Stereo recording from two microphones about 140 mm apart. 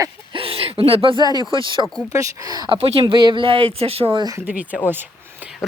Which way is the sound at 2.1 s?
25° right (ahead or behind).